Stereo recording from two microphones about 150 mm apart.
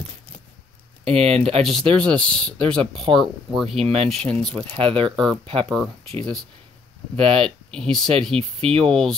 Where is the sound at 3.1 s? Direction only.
35° right (ahead or behind).